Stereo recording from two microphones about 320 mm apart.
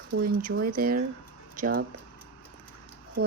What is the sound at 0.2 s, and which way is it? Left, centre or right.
Speech, right.